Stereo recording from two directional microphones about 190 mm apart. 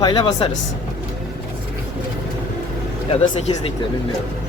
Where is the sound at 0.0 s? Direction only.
25° left (ahead or behind).